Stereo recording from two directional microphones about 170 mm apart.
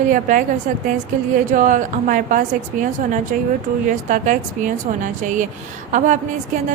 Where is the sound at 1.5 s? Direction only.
50° right (ahead or behind).